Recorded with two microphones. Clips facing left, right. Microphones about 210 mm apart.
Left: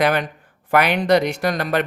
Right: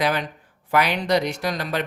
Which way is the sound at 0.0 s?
55° left (ahead or behind).